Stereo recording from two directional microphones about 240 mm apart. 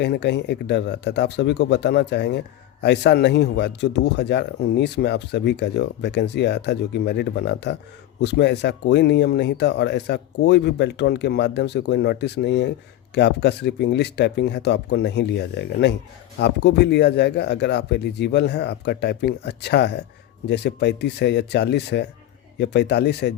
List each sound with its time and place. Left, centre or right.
0.0 s a man's voice: left